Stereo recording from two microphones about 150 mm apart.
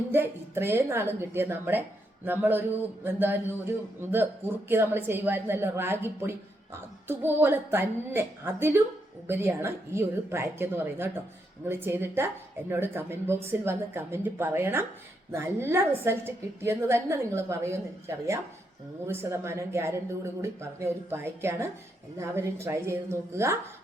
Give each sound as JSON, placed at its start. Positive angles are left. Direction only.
{"t": 0.1, "sound": "a woman's voice", "side_deg": -15}
{"t": 19.0, "sound": "a woman's voice", "side_deg": -15}